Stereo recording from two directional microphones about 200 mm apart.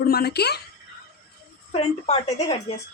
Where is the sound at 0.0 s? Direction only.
50° left (ahead or behind).